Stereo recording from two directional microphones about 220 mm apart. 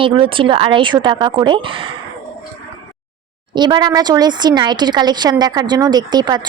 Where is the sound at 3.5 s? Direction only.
20° right (ahead or behind).